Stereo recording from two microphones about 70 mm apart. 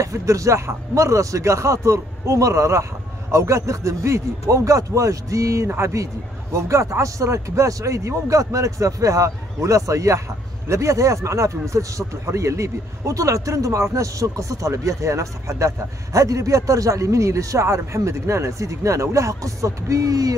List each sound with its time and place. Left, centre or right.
0.0 s speech: right